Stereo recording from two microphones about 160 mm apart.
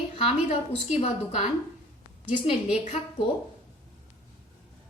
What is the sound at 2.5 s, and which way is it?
Speech, 40° left (ahead or behind).